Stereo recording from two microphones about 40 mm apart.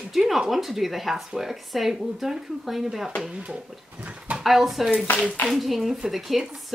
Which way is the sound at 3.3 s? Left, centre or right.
Right.